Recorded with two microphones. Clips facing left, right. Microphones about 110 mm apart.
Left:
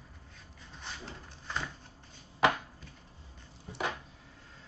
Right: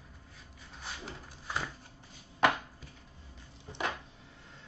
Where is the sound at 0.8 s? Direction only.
10° right (ahead or behind).